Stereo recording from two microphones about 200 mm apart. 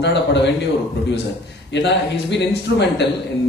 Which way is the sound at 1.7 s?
60° left (ahead or behind).